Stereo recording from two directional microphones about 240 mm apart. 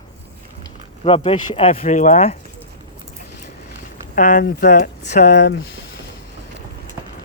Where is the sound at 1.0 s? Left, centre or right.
Left.